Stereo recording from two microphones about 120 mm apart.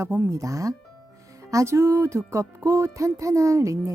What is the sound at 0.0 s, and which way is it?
Music, 20° right (ahead or behind).